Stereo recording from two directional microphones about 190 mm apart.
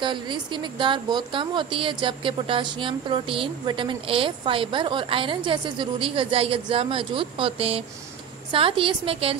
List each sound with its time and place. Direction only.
0.0 s a woman's voice: 25° right (ahead or behind)